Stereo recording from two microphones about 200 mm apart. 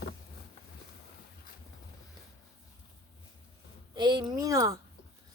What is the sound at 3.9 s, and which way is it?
Speech, 20° right (ahead or behind).